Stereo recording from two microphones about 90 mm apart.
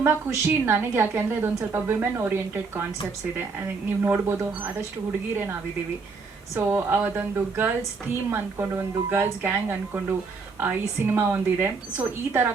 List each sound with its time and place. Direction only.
0.0 s a woman's voice: 30° right (ahead or behind)
4.0 s a woman's voice: 25° right (ahead or behind)
6.6 s a woman's voice: 25° right (ahead or behind)